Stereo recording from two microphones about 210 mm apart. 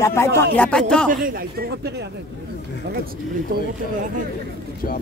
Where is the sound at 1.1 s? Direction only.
40° right (ahead or behind).